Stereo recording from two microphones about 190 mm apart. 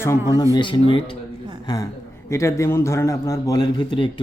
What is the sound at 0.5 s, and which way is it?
Speech, 25° left (ahead or behind).